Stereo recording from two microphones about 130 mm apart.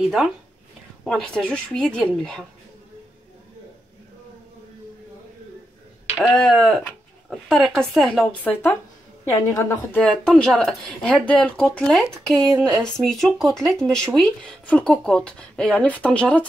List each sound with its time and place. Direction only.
0.0 s speech: centre (ahead or behind)
6.1 s speech: centre (ahead or behind)
9.5 s a woman's voice: 20° left (ahead or behind)
9.9 s speech: 5° left (ahead or behind)